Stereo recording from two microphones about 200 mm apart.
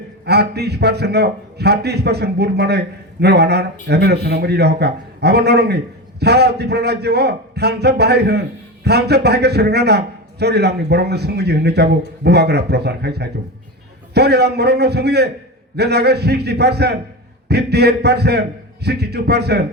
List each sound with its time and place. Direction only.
0.3 s a man's voice: 55° right (ahead or behind)